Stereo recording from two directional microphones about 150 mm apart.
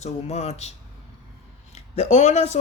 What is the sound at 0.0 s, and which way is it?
Speech, 45° left (ahead or behind).